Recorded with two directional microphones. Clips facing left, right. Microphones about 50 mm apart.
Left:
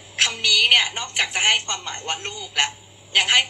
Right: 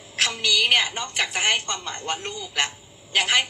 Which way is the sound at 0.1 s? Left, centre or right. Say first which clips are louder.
Left 2 dB; left.